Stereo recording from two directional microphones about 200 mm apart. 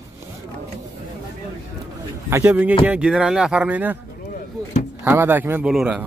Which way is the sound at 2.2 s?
10° right (ahead or behind).